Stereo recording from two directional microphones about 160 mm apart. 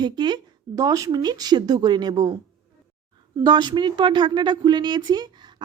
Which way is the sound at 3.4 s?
25° right (ahead or behind).